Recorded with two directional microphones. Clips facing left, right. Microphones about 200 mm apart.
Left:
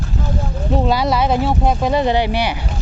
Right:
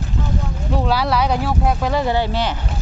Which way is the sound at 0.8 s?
20° left (ahead or behind).